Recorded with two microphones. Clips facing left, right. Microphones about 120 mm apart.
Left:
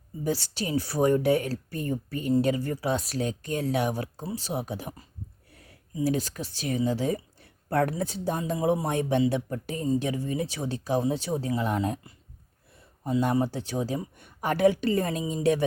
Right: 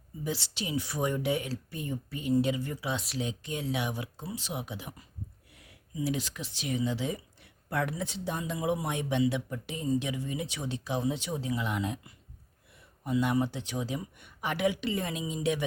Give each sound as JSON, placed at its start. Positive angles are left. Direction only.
{"t": 0.3, "sound": "speech", "side_deg": 40}